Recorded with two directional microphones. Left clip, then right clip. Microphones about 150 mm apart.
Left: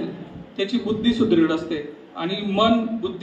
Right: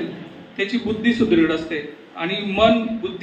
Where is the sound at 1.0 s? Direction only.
10° left (ahead or behind).